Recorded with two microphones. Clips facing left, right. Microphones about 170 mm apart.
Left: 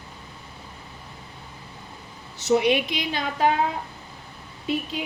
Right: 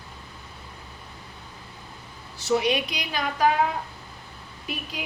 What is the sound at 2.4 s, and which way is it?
A woman's voice, 20° left (ahead or behind).